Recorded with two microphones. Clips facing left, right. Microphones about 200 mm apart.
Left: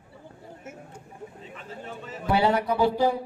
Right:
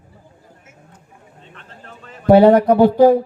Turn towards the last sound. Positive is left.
turn(degrees=-50)  # may be behind; listen again after turning